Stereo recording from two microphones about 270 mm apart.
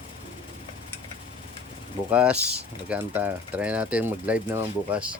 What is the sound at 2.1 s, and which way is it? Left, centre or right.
Speech, centre.